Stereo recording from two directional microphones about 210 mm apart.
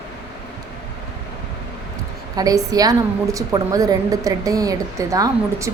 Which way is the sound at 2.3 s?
15° right (ahead or behind).